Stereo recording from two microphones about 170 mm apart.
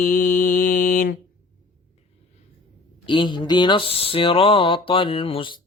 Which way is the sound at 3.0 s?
30° left (ahead or behind).